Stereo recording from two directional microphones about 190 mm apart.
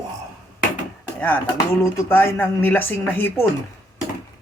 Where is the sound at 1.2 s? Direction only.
10° left (ahead or behind).